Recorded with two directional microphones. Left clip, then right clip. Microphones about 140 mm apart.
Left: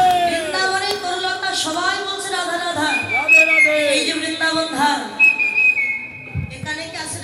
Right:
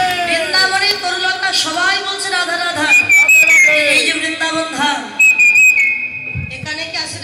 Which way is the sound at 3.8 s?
45° left (ahead or behind).